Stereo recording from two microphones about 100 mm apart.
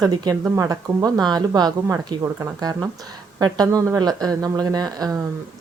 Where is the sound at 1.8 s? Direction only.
30° right (ahead or behind).